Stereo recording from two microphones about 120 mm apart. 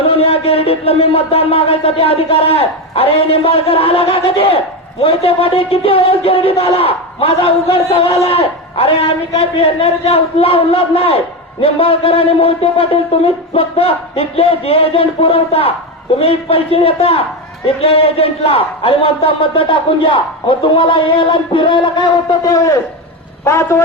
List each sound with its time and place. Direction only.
0.0 s speech: 55° left (ahead or behind); by 23.8 s 20° left (ahead or behind)